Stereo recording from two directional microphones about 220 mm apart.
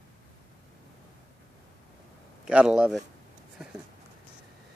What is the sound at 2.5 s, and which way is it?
Speech, 5° right (ahead or behind).